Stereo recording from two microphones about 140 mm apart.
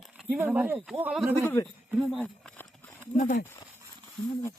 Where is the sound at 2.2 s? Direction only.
10° left (ahead or behind).